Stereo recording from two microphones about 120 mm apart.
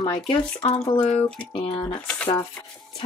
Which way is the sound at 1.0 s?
55° left (ahead or behind).